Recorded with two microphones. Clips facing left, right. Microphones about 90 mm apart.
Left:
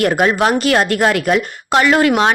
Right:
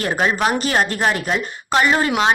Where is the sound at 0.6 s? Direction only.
80° left; by 2.3 s 60° left (ahead or behind).